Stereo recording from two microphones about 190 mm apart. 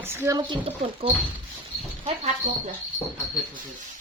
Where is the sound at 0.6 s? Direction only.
30° right (ahead or behind).